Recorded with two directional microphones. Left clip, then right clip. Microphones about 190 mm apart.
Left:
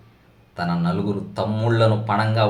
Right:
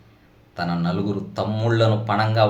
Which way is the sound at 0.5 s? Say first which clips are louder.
Left 1 dB; 5° right (ahead or behind).